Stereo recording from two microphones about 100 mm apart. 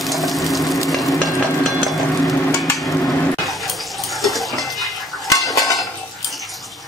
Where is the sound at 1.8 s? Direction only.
Centre (ahead or behind).